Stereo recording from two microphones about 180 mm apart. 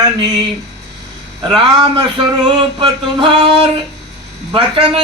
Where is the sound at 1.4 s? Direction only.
25° right (ahead or behind).